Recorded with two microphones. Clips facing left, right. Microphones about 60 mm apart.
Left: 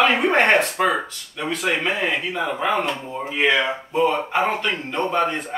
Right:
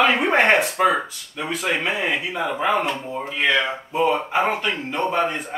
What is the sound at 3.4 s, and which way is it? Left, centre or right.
Speech, centre.